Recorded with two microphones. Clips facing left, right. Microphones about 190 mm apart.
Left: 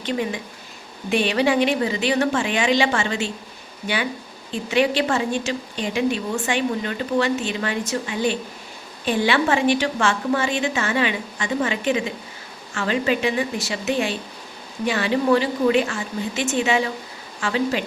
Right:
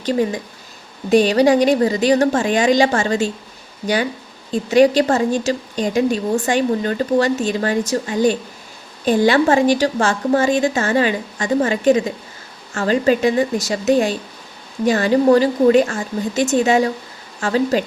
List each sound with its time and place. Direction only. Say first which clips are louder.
0.0 s a woman's voice: right 6 dB; 40° right (ahead or behind)
4.5 s a woman's voice: right 7 dB; 40° right (ahead or behind)